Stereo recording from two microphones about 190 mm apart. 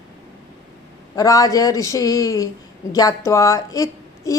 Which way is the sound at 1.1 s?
20° left (ahead or behind).